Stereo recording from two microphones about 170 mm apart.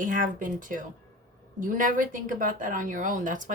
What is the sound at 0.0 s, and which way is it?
Speech, 50° right (ahead or behind).